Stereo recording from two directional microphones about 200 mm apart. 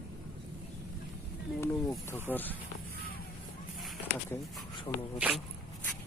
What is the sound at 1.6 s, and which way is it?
Speech, 10° left (ahead or behind).